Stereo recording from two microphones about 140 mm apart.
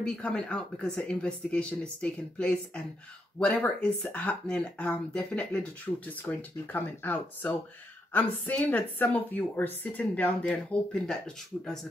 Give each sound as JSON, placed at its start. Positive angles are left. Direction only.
{"t": 0.0, "sound": "speech", "side_deg": 5}
{"t": 5.9, "sound": "speech", "side_deg": 25}
{"t": 6.2, "sound": "speech", "side_deg": 15}